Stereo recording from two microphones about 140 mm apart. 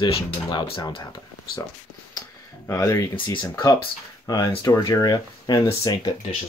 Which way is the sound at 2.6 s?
20° left (ahead or behind).